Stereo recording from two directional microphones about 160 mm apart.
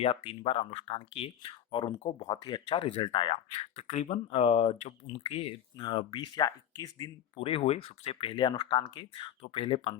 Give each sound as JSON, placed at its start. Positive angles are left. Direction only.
{"t": 0.0, "sound": "speech", "side_deg": 35}
{"t": 3.5, "sound": "speech", "side_deg": 45}
{"t": 7.3, "sound": "speech", "side_deg": 35}